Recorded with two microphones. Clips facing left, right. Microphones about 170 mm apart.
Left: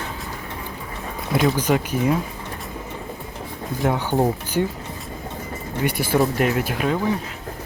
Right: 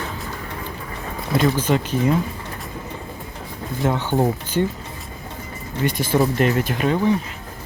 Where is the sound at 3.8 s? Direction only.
10° left (ahead or behind).